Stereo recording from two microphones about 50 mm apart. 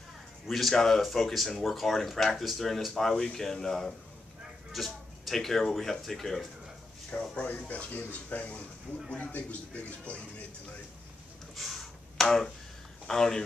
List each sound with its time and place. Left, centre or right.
0.5 s speech: centre
4.7 s speech: centre
7.1 s a man's voice: left
11.5 s a sound: centre
13.0 s a man's voice: centre